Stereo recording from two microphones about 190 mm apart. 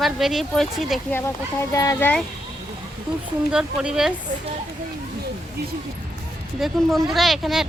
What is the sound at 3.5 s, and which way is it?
Speech, 5° right (ahead or behind).